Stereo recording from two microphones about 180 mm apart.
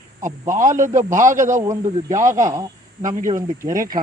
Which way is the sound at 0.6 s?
45° right (ahead or behind).